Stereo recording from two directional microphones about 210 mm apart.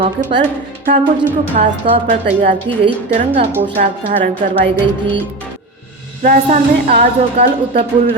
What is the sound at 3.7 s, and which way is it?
Speech, 40° right (ahead or behind).